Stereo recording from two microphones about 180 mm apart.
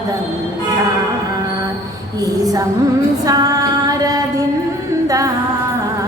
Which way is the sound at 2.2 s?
20° right (ahead or behind).